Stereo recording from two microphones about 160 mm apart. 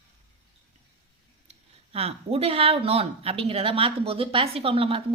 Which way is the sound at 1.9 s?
40° right (ahead or behind).